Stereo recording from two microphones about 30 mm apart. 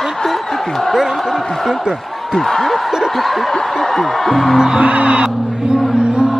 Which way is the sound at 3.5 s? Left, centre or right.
Centre.